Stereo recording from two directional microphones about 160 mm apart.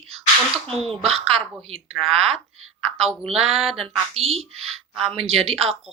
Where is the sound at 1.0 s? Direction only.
40° right (ahead or behind).